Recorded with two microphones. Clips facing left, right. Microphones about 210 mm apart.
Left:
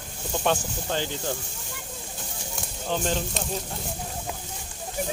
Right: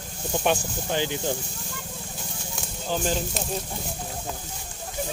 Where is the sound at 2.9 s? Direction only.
5° right (ahead or behind).